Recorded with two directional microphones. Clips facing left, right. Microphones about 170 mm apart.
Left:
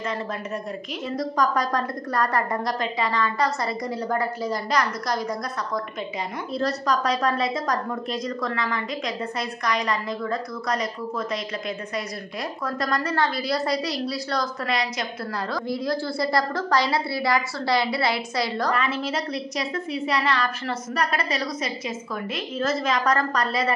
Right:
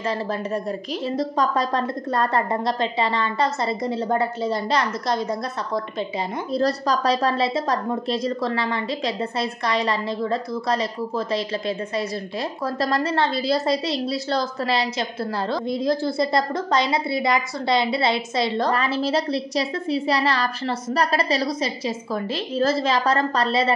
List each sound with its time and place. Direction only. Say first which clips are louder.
1.0 s a woman's voice: right 1 dB; 25° right (ahead or behind)
6.5 s a woman's voice: right 3 dB; 35° right (ahead or behind)